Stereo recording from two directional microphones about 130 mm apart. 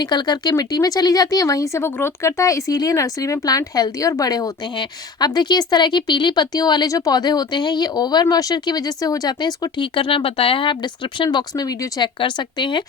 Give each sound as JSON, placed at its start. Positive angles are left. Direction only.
{"t": 0.0, "sound": "speech", "side_deg": 35}